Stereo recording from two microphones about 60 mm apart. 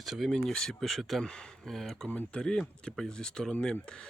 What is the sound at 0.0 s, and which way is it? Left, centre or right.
Speech, centre.